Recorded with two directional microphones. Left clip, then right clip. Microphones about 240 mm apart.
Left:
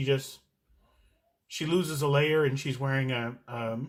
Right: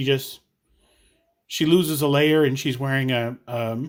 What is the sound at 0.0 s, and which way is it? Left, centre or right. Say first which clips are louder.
Speech: right 6 dB; right.